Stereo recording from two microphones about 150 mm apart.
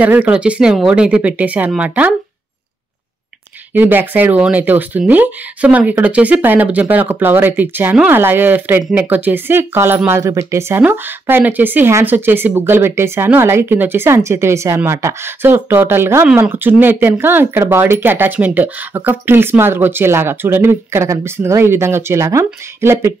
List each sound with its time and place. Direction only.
0.0 s speech: 10° right (ahead or behind)
3.7 s speech: 15° right (ahead or behind)